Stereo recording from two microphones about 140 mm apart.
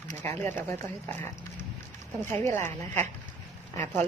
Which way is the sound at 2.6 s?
55° right (ahead or behind).